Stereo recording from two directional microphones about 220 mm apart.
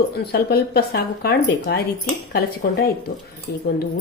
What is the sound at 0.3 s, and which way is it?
Speech, 45° left (ahead or behind).